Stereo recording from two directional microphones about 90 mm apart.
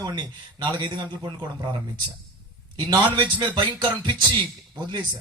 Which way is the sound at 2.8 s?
50° right (ahead or behind).